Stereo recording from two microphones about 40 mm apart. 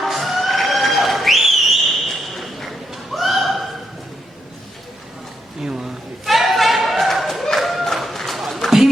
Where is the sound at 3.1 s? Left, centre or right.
Centre.